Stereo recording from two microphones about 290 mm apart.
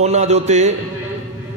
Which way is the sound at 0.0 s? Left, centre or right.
Right.